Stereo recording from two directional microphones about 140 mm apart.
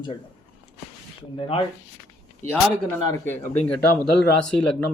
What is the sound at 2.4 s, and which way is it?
Speech, 15° left (ahead or behind).